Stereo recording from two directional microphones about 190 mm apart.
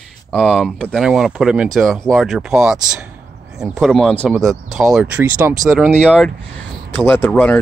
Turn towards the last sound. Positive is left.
turn(degrees=10)  # may be behind; listen again after turning